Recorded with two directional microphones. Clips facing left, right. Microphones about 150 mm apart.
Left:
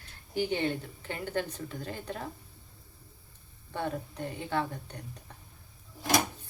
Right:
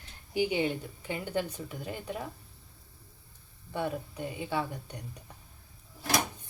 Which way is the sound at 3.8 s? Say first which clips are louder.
Right 1 dB; 10° right (ahead or behind).